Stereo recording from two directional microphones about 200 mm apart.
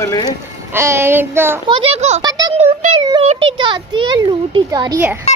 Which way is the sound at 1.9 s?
35° right (ahead or behind).